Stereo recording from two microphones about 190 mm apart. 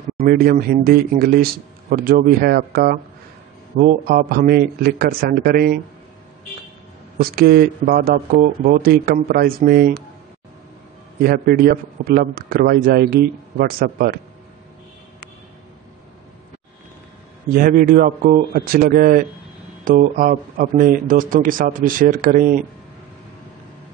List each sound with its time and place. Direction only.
0.2 s a man's voice: 55° right (ahead or behind)
7.2 s a man's voice: 55° right (ahead or behind)
11.2 s a man's voice: 55° right (ahead or behind)
17.5 s a man's voice: 45° right (ahead or behind)